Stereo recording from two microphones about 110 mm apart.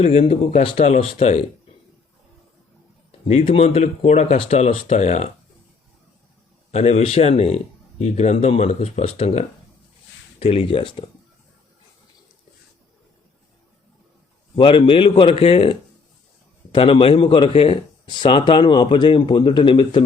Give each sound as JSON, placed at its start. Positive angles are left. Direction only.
{"t": 0.0, "sound": "a man's voice", "side_deg": 70}
{"t": 3.1, "sound": "speech", "side_deg": 60}
{"t": 4.4, "sound": "speech", "side_deg": 70}
{"t": 6.7, "sound": "speech", "side_deg": 90}
{"t": 10.4, "sound": "a man's voice", "side_deg": 60}
{"t": 14.5, "sound": "a man's voice", "side_deg": 55}
{"t": 18.1, "sound": "speech", "side_deg": 45}